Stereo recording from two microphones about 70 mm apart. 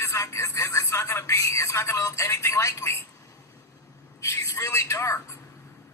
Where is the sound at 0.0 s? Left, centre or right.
Left.